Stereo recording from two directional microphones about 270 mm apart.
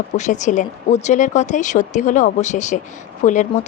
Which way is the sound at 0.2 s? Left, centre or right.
Left.